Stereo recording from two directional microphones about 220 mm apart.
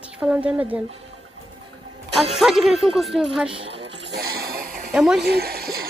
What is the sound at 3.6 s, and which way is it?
Music, 55° right (ahead or behind).